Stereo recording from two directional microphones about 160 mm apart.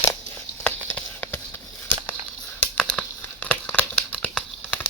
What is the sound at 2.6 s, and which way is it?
Crumpling, 5° left (ahead or behind).